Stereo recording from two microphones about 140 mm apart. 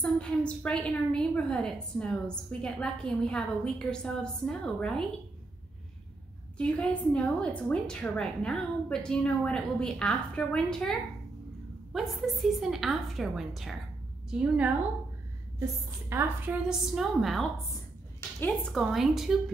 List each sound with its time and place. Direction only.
0.0 s a woman's voice: 5° left (ahead or behind)
6.6 s a woman's voice: 10° left (ahead or behind); by 16.5 s 15° right (ahead or behind)
16.6 s a woman's voice: 5° right (ahead or behind)
18.7 s a woman's voice: centre (ahead or behind)